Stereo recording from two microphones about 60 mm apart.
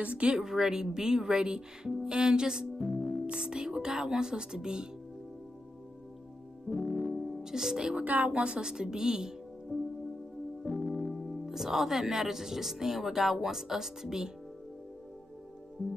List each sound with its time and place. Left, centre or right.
0.0 s speech: centre
0.4 s speech: centre
6.7 s music: centre
8.0 s speech: right
8.3 s speech: centre
10.7 s speech: centre